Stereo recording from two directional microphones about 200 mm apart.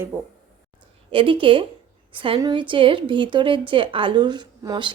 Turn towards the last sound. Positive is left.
turn(degrees=-20)  # may be behind; listen again after turning